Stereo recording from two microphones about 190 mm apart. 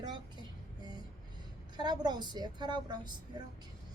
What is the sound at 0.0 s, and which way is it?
Music, 25° right (ahead or behind).